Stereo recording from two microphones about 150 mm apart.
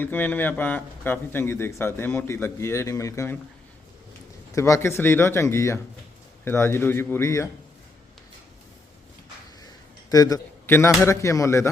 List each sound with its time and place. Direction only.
0.0 s speech: 10° left (ahead or behind)
4.5 s speech: 20° left (ahead or behind)
10.1 s a man's voice: 25° left (ahead or behind)